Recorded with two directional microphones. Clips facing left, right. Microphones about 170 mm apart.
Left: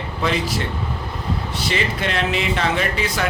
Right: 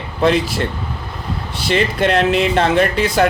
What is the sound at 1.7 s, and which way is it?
Speech, 55° right (ahead or behind).